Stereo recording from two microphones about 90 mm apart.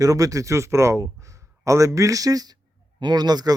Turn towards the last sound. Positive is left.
turn(degrees=-45)  # may be behind; listen again after turning